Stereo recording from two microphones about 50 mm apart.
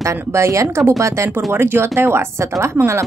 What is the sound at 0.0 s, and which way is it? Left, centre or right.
Speech, right.